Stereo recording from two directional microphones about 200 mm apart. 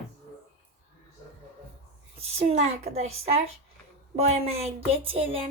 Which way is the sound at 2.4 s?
30° right (ahead or behind).